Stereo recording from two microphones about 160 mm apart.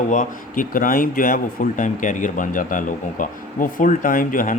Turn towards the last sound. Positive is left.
turn(degrees=55)  # may be behind; listen again after turning